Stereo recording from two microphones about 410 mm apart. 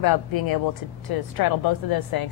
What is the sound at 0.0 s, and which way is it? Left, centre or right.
A woman's voice, left.